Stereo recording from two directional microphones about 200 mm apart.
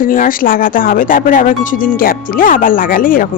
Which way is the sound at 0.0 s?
45° left (ahead or behind).